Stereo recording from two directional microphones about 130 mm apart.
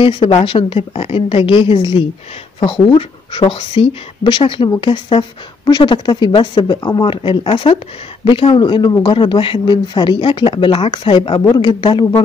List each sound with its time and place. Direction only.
0.0 s a woman's voice: 40° left (ahead or behind)